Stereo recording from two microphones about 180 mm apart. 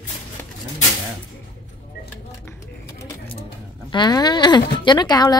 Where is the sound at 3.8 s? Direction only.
25° left (ahead or behind).